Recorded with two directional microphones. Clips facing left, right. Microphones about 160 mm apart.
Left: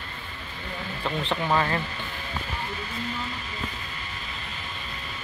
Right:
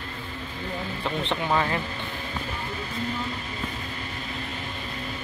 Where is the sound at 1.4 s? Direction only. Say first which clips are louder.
Left 1 dB; 15° right (ahead or behind).